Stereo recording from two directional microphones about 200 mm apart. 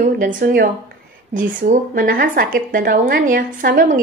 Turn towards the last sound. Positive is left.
turn(degrees=-45)  # may be behind; listen again after turning